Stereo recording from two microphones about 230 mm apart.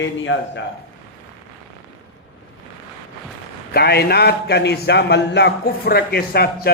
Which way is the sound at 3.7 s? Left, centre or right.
Left.